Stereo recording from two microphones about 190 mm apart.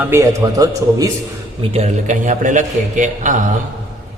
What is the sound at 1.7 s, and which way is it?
A man's voice, 40° right (ahead or behind).